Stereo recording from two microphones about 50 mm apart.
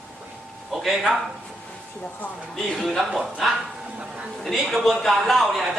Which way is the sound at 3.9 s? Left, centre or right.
Right.